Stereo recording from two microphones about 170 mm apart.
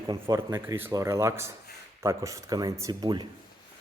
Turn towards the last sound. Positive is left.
turn(degrees=-25)  # may be behind; listen again after turning